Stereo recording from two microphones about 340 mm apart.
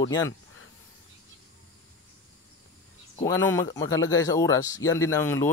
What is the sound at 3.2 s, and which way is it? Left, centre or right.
Speech, centre.